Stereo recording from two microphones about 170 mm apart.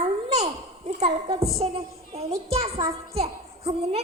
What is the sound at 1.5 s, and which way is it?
A woman's voice, 35° right (ahead or behind).